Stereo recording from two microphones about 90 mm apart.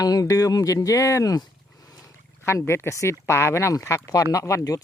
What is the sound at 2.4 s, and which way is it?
Speech, 30° left (ahead or behind).